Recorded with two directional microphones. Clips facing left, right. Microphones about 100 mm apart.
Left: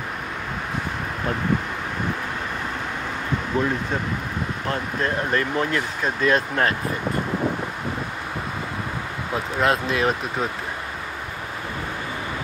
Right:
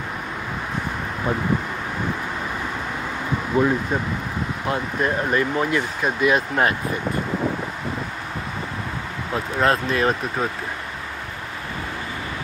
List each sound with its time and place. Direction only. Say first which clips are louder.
3.6 s speech: right 5 dB; 10° right (ahead or behind)
9.3 s speech: right 1 dB; 5° left (ahead or behind)